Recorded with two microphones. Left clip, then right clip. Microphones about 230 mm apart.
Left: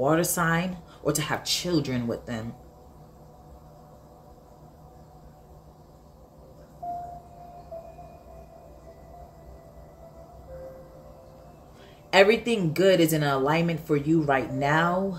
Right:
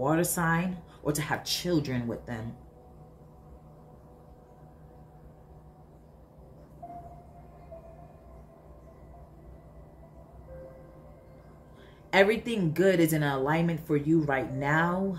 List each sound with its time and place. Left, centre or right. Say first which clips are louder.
0.0 s speech: left 4 dB; centre
12.1 s speech: left 5 dB; centre